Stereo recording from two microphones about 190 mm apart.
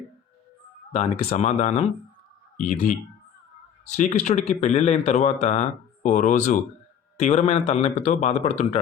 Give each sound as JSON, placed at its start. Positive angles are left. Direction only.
{"t": 0.9, "sound": "speech", "side_deg": 35}
{"t": 3.9, "sound": "speech", "side_deg": 40}